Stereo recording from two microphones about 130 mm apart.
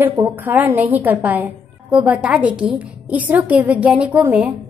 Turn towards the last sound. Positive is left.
turn(degrees=-10)  # may be behind; listen again after turning